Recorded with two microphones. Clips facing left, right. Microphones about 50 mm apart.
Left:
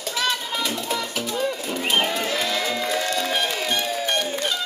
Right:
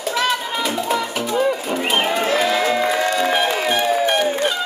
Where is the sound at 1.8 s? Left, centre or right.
Centre.